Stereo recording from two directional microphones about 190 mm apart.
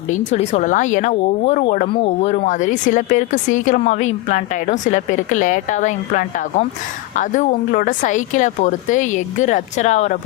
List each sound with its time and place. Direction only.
0.3 s speech: 40° left (ahead or behind)
1.9 s speech: 30° left (ahead or behind)